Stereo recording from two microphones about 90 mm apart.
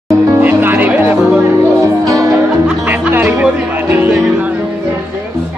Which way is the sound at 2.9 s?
20° right (ahead or behind).